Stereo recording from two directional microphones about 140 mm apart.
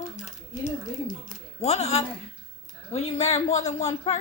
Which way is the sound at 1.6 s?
50° left (ahead or behind).